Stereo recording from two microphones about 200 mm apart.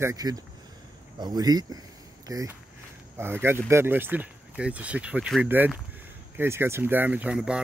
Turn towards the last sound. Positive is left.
turn(degrees=-5)  # may be behind; listen again after turning